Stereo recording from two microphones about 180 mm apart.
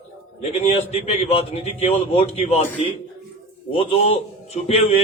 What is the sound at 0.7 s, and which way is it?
A man's voice, 35° left (ahead or behind).